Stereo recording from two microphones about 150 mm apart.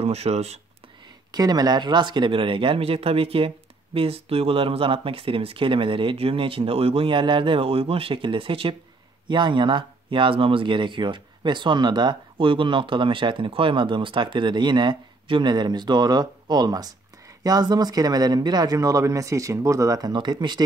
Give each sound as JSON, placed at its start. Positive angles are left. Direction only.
{"t": 0.0, "sound": "speech", "side_deg": -45}
{"t": 1.3, "sound": "speech", "side_deg": -25}